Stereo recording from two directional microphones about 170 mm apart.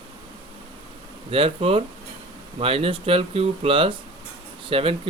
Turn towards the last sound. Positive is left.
turn(degrees=-35)  # may be behind; listen again after turning